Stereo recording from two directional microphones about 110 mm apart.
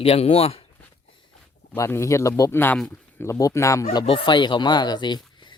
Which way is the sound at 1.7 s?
25° left (ahead or behind).